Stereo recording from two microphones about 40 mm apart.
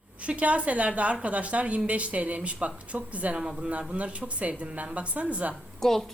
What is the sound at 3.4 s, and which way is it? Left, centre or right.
A woman's voice, right.